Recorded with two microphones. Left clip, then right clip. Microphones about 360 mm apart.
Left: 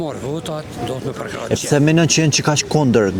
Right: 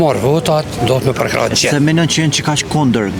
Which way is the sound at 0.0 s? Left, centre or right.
Right.